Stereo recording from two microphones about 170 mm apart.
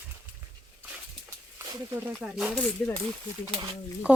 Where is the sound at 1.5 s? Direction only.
15° right (ahead or behind).